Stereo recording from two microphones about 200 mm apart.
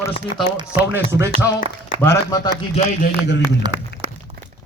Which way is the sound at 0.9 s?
15° right (ahead or behind).